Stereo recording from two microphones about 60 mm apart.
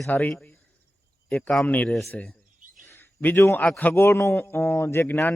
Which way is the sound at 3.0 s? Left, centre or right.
Left.